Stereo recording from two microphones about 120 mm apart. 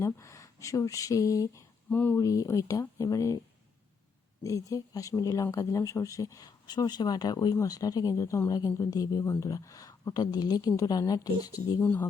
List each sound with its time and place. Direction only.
0.0 s speech: 25° left (ahead or behind)
1.9 s speech: 15° left (ahead or behind)
2.1 s speech: 30° left (ahead or behind)
4.4 s speech: 30° left (ahead or behind)
11.8 s speech: 15° left (ahead or behind)